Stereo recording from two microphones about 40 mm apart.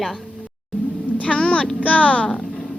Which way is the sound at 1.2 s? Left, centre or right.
Left.